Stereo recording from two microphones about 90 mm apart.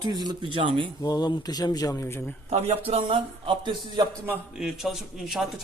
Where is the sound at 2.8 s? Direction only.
85° right; by 4.0 s 65° right (ahead or behind).